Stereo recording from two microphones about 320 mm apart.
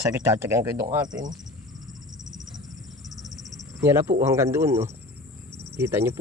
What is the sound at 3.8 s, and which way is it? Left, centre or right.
Speech, centre.